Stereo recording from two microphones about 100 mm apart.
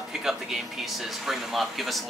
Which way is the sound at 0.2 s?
5° right (ahead or behind).